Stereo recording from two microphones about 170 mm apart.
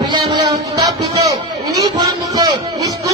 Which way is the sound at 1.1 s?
20° right (ahead or behind).